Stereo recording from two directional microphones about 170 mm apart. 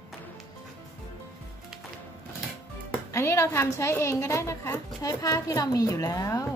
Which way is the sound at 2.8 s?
15° left (ahead or behind).